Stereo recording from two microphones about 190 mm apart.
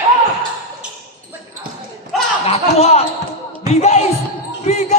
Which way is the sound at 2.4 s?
30° left (ahead or behind).